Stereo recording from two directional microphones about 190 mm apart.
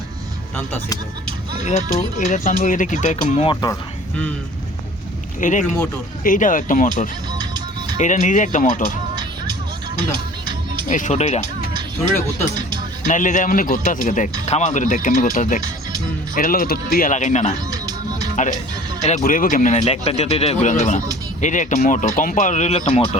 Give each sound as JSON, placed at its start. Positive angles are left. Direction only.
{"t": 1.6, "sound": "speech", "side_deg": 45}
{"t": 3.5, "sound": "speech", "side_deg": 20}
{"t": 5.4, "sound": "speech", "side_deg": 40}
{"t": 7.3, "sound": "music", "side_deg": -20}
{"t": 7.9, "sound": "speech", "side_deg": 40}
{"t": 9.1, "sound": "music", "side_deg": -25}
{"t": 10.8, "sound": "speech", "side_deg": 40}
{"t": 13.1, "sound": "speech", "side_deg": 40}